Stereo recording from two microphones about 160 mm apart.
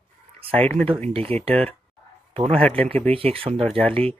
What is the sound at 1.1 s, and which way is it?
Speech, 35° right (ahead or behind).